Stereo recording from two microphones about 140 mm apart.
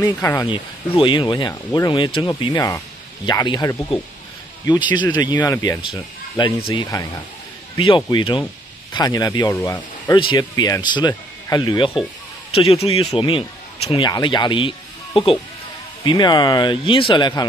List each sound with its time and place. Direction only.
0.0 s speech: 25° left (ahead or behind)
0.5 s speech: 35° left (ahead or behind)
10.1 s speech: 35° left (ahead or behind)
12.4 s speech: 45° left (ahead or behind)
16.0 s speech: 30° left (ahead or behind)